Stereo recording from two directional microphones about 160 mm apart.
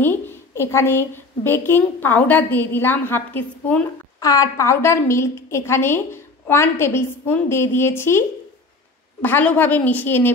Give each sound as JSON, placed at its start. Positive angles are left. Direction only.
{"t": 0.0, "sound": "a woman's voice", "side_deg": 15}
{"t": 4.2, "sound": "a woman's voice", "side_deg": 20}